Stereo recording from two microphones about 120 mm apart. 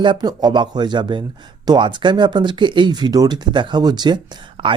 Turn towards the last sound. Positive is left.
turn(degrees=-45)  # may be behind; listen again after turning